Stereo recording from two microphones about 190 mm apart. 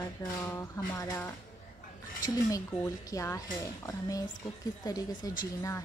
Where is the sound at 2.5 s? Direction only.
20° left (ahead or behind).